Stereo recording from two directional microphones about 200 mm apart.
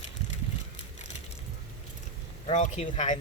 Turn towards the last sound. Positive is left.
turn(degrees=35)  # may be behind; listen again after turning